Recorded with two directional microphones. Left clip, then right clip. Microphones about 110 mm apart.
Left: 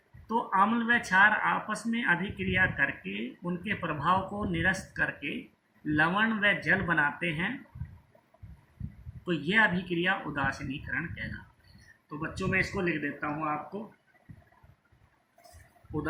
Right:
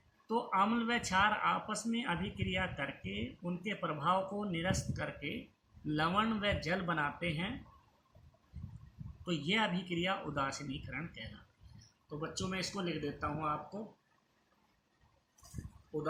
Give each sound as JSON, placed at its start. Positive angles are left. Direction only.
{"t": 0.3, "sound": "speech", "side_deg": -35}
{"t": 9.2, "sound": "speech", "side_deg": -40}